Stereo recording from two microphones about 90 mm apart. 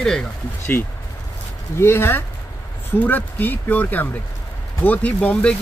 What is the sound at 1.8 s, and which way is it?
A man's voice, 25° left (ahead or behind).